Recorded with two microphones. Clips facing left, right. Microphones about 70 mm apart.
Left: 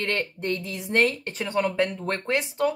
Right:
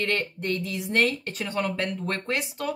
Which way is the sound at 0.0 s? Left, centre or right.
Left.